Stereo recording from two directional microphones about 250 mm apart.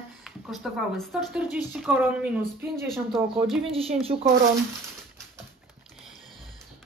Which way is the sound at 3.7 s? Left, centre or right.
Right.